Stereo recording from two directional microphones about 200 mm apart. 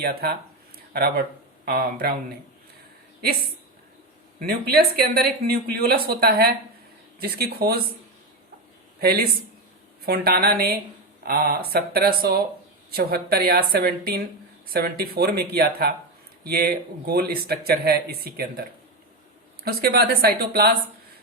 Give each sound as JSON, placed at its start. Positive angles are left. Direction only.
{"t": 0.0, "sound": "speech", "side_deg": -50}
{"t": 4.4, "sound": "speech", "side_deg": -50}
{"t": 9.0, "sound": "speech", "side_deg": -50}
{"t": 19.6, "sound": "speech", "side_deg": -50}